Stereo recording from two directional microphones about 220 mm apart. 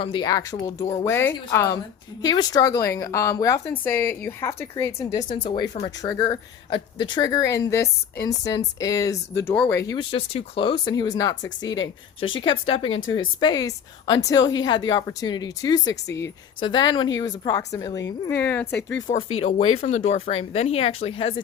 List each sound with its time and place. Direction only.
0.0 s speech: 20° left (ahead or behind)
5.3 s speech: 25° left (ahead or behind)
15.9 s speech: 55° left (ahead or behind)
16.6 s speech: 20° left (ahead or behind)
18.8 s speech: 55° left (ahead or behind)
19.4 s speech: 30° left (ahead or behind)